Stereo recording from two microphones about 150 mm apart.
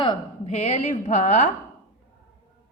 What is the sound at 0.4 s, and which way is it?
A woman's voice, 45° left (ahead or behind).